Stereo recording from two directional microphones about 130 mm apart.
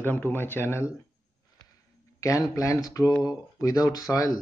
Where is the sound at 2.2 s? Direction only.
25° left (ahead or behind).